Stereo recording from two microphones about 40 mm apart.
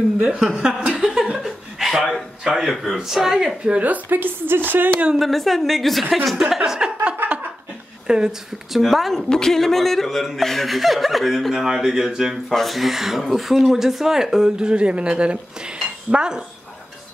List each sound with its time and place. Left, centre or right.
0.4 s speech: centre
0.8 s chuckle: centre
2.4 s speech: centre
3.8 s speech: right
5.2 s a woman's voice: centre
7.2 s a sound: right
8.1 s speech: centre
8.7 s a woman's voice: centre
11.5 s speech: centre
12.4 s a woman's voice: centre
14.6 s speech: right